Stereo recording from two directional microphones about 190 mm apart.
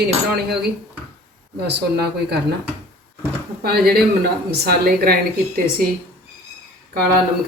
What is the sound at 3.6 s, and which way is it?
A woman's voice, 55° right (ahead or behind).